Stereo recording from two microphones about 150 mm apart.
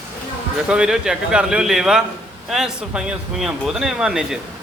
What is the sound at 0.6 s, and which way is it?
Speech, 5° right (ahead or behind).